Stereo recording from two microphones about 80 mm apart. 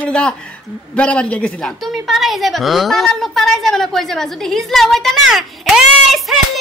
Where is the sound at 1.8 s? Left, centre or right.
Centre.